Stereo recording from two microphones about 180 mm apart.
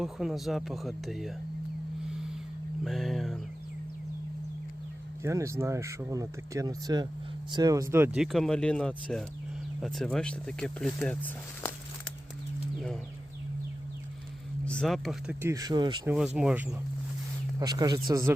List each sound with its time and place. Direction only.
0.0 s speech: centre (ahead or behind)
2.8 s speech: centre (ahead or behind)
5.2 s speech: 15° right (ahead or behind); by 11.7 s 10° left (ahead or behind)
14.6 s speech: 5° left (ahead or behind)
15.4 s speech: 15° right (ahead or behind)
16.0 s speech: 5° right (ahead or behind)
17.6 s speech: 20° right (ahead or behind)